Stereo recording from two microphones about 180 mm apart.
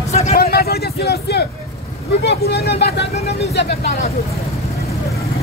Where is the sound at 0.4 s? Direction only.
60° left (ahead or behind).